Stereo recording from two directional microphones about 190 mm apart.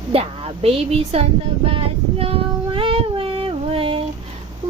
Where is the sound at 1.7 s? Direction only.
30° right (ahead or behind).